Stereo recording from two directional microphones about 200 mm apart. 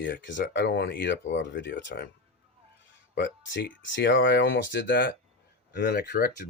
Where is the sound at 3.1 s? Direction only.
65° left (ahead or behind).